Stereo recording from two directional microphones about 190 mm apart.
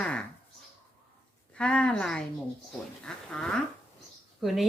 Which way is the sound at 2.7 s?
5° left (ahead or behind).